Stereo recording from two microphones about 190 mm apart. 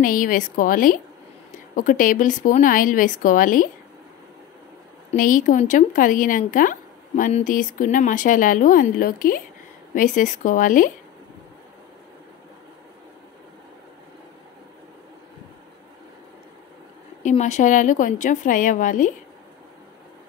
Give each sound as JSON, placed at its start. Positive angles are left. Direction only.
{"t": 0.0, "sound": "speech", "side_deg": 45}
{"t": 5.1, "sound": "speech", "side_deg": 45}
{"t": 17.2, "sound": "a woman's voice", "side_deg": 40}